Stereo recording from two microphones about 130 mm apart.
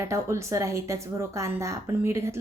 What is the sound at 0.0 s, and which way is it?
A woman's voice, 20° right (ahead or behind).